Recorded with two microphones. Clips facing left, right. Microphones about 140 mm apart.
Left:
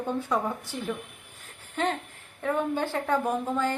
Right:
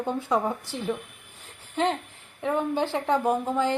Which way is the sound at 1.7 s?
10° right (ahead or behind).